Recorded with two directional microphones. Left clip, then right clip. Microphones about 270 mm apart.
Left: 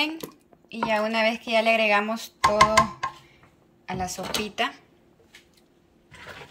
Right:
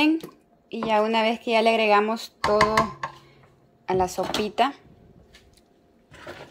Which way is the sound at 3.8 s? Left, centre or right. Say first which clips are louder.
Right 7 dB; centre.